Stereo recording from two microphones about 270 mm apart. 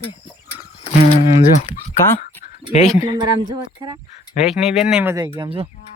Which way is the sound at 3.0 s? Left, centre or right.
Centre.